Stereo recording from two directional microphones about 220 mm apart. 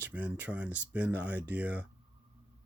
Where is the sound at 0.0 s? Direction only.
5° right (ahead or behind).